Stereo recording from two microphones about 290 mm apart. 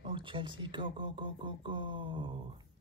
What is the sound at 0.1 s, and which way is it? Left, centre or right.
Speech, centre.